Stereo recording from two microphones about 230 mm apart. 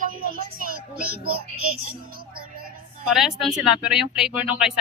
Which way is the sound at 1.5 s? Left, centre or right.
Right.